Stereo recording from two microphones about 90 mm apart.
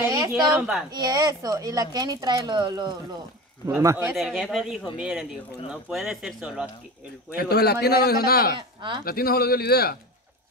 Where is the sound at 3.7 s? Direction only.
25° right (ahead or behind).